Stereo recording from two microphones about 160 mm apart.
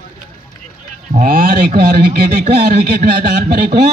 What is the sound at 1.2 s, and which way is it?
A man's voice, 65° right (ahead or behind).